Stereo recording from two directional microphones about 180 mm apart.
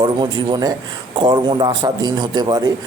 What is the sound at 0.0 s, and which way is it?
A man's voice, 25° right (ahead or behind).